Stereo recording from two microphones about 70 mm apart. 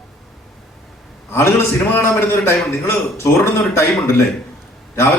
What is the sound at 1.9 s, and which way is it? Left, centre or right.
A man's voice, left.